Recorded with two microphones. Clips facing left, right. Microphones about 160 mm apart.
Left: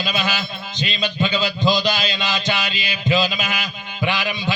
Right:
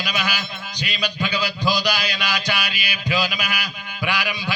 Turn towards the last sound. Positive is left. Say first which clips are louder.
# left 3 dB
turn(degrees=20)  # may be behind; listen again after turning